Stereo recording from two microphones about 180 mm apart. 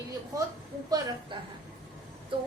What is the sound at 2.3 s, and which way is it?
Speech, 30° right (ahead or behind).